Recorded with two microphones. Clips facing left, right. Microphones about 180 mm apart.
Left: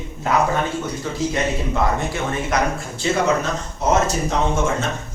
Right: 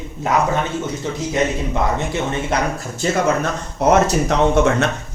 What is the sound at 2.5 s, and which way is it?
Speech, 30° right (ahead or behind).